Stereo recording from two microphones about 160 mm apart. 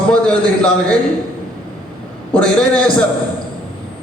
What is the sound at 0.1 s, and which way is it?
Speech, 5° left (ahead or behind).